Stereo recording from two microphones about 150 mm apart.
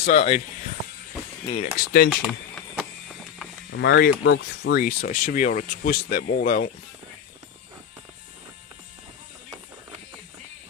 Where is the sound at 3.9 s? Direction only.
90° left.